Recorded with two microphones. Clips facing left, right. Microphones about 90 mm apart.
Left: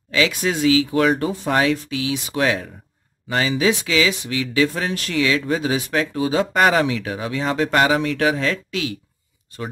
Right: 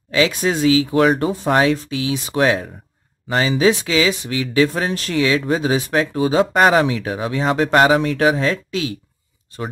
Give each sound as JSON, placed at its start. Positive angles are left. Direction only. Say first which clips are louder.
{"t": 0.1, "sound": "speech", "louder": "right 3 dB", "side_deg": -30}